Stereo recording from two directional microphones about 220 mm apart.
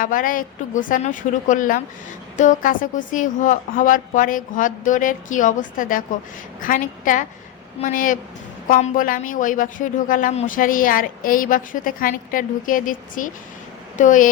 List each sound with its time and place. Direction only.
0.0 s speech: 40° left (ahead or behind)